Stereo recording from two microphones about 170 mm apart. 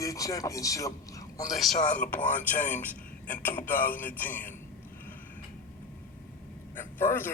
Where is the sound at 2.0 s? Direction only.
50° left (ahead or behind).